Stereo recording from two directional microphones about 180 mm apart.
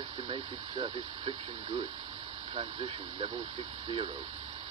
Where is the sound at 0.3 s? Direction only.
30° right (ahead or behind).